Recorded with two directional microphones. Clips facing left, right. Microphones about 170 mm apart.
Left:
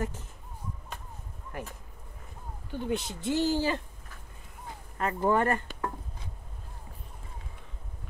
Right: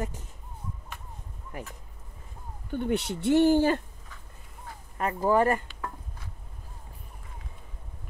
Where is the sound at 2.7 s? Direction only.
65° right (ahead or behind).